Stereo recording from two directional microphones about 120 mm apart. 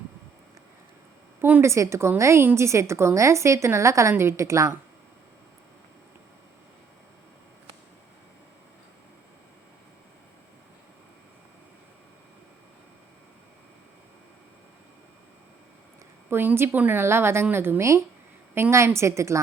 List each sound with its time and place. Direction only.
1.4 s a woman's voice: 15° right (ahead or behind)
16.3 s a woman's voice: 20° right (ahead or behind)